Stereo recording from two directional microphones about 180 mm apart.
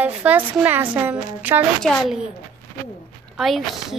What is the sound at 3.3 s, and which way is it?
Speech, centre (ahead or behind).